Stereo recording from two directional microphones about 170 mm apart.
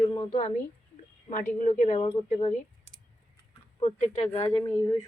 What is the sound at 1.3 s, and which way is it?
Speech, 50° left (ahead or behind).